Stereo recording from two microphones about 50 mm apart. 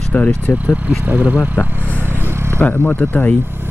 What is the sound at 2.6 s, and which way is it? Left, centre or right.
Speech, left.